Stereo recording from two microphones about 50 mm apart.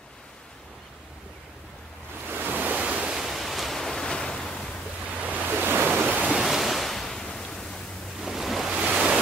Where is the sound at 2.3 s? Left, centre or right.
Right.